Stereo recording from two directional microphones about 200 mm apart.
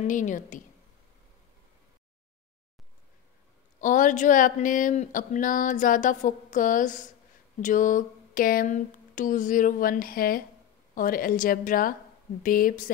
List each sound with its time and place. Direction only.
0.0 s speech: 40° left (ahead or behind)
3.8 s a woman's voice: 40° left (ahead or behind)